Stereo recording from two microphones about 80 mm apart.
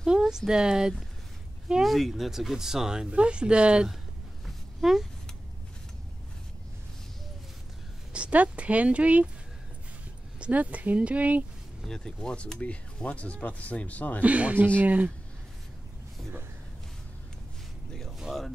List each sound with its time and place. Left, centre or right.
0.0 s a sound: centre
0.5 s speech: centre
4.8 s speech: centre
8.1 s speech: centre
10.4 s speech: centre
11.8 s speech: centre
14.2 s speech: centre
18.2 s speech: centre